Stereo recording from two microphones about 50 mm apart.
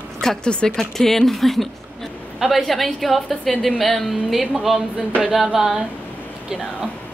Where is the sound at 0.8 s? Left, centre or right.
Centre.